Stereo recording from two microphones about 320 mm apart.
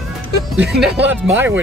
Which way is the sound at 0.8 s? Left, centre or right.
Centre.